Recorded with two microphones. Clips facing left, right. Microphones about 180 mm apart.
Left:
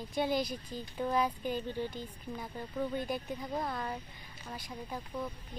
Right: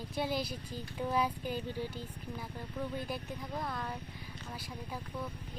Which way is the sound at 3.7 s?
Centre (ahead or behind).